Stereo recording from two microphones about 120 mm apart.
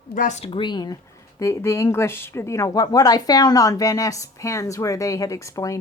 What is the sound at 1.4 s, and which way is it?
Speech, 25° left (ahead or behind).